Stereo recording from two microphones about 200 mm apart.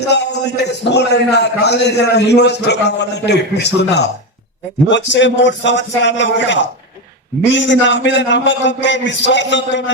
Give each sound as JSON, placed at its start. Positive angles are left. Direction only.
{"t": 0.1, "sound": "a man's voice", "side_deg": 60}